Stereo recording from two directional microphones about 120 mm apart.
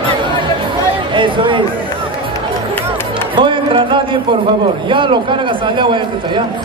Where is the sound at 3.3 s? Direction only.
45° right (ahead or behind).